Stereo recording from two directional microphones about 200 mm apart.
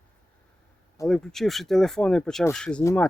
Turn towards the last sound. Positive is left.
turn(degrees=10)  # may be behind; listen again after turning